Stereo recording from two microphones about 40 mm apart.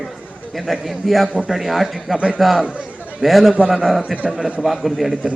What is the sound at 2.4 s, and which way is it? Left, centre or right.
A man's voice, centre.